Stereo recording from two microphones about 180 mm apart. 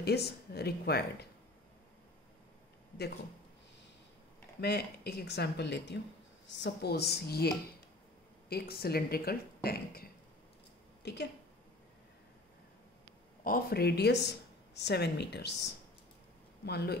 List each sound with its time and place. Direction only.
0.0 s speech: 65° left (ahead or behind)
4.6 s speech: 60° left (ahead or behind)
8.5 s speech: 60° left (ahead or behind)
11.0 s a sound: 70° left (ahead or behind)
13.4 s speech: 55° left (ahead or behind)